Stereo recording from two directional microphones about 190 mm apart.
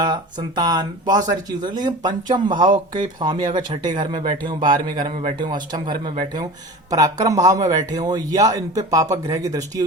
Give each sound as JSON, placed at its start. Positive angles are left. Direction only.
{"t": 0.0, "sound": "speech", "side_deg": -25}
{"t": 5.0, "sound": "a man's voice", "side_deg": -40}
{"t": 5.4, "sound": "speech", "side_deg": -25}